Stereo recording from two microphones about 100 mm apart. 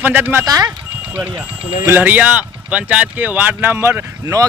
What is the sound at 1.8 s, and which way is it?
Speech, 20° right (ahead or behind).